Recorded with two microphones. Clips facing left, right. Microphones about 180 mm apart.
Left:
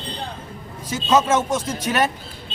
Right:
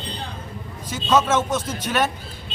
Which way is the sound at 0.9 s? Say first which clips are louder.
Left 1 dB; 10° left (ahead or behind).